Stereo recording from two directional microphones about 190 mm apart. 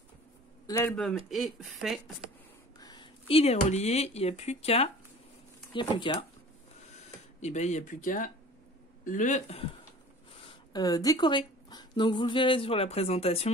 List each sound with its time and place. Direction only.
0.7 s speech: 15° left (ahead or behind)
0.9 s speech: centre (ahead or behind)
2.8 s speech: 20° left (ahead or behind)
7.3 s speech: 35° left (ahead or behind)
10.7 s speech: 20° left (ahead or behind)